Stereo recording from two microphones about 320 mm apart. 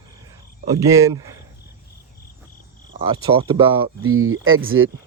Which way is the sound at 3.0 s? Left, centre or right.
Centre.